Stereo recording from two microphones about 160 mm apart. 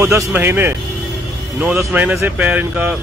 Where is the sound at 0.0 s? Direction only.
20° right (ahead or behind).